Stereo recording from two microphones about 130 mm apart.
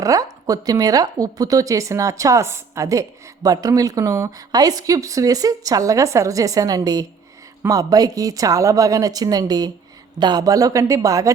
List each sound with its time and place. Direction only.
0.0 s speech: 25° right (ahead or behind)